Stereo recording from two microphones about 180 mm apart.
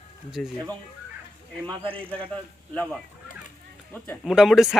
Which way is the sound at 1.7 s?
30° right (ahead or behind).